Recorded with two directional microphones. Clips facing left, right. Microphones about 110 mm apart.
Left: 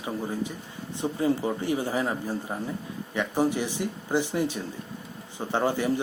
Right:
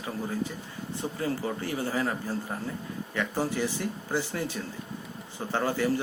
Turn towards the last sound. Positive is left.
turn(degrees=20)  # may be behind; listen again after turning